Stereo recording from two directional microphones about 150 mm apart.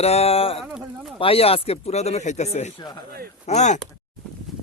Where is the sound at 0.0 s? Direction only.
45° left (ahead or behind).